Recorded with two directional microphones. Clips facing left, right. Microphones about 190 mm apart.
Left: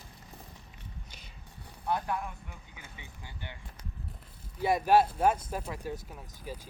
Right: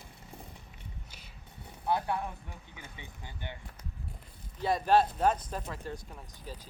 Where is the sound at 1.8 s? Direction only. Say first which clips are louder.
Right 1 dB; 25° right (ahead or behind).